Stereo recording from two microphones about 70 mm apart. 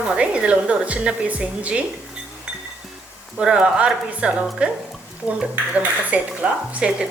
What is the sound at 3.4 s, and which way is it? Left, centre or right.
A woman's voice, centre.